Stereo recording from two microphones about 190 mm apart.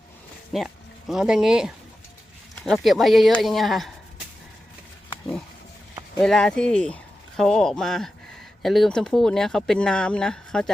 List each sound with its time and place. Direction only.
0.5 s speech: centre (ahead or behind)
6.1 s speech: 5° left (ahead or behind)